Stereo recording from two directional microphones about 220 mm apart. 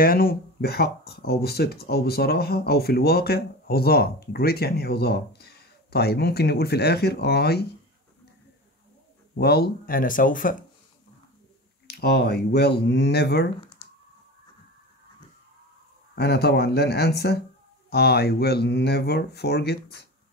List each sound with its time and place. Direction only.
0.0 s speech: 40° left (ahead or behind)
9.4 s speech: 45° left (ahead or behind)
11.9 s speech: 45° left (ahead or behind)
16.2 s speech: 45° left (ahead or behind)